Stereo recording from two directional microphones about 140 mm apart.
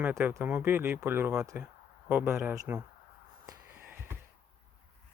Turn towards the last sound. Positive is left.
turn(degrees=-10)  # may be behind; listen again after turning